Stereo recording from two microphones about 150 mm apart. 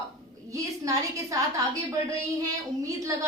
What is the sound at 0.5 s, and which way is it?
A woman's voice, 20° right (ahead or behind).